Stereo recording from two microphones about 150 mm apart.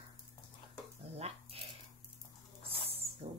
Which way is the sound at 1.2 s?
45° right (ahead or behind).